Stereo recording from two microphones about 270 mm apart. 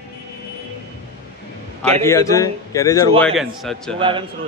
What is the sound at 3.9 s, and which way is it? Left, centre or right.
Speech, centre.